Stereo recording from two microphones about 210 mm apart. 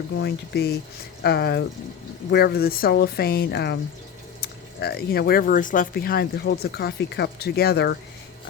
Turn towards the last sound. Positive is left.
turn(degrees=50)  # may be behind; listen again after turning